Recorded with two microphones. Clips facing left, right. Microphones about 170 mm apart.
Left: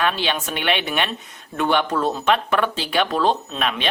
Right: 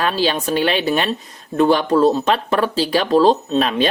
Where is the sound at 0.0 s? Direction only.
35° right (ahead or behind).